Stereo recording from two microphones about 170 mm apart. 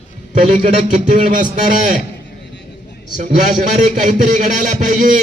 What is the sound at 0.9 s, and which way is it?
A man's voice, 50° right (ahead or behind).